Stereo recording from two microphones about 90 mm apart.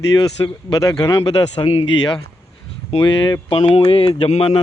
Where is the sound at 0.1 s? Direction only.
55° left (ahead or behind).